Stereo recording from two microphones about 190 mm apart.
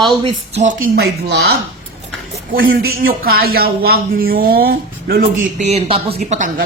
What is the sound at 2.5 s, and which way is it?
Speech, 50° right (ahead or behind).